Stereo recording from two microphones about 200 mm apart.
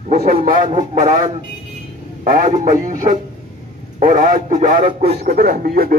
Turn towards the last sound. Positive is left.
turn(degrees=-50)  # may be behind; listen again after turning